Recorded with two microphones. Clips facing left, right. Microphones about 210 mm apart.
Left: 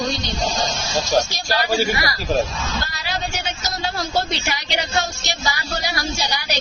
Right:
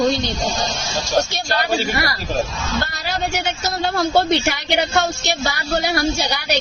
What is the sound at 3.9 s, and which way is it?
Speech, 55° right (ahead or behind).